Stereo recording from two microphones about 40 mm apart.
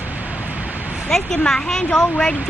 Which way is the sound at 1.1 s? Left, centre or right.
Centre.